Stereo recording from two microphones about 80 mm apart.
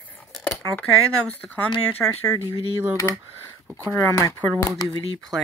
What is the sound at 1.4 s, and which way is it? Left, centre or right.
Speech, centre.